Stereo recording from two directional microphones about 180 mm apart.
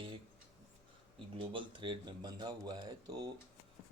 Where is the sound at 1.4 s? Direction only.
30° right (ahead or behind).